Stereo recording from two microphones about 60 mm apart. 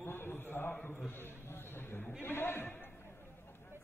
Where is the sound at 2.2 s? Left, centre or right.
Left.